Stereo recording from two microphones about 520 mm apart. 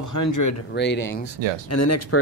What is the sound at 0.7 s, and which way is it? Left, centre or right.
Speech, centre.